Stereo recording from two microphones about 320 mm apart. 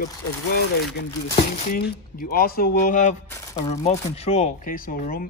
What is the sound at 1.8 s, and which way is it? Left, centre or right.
Speech, left.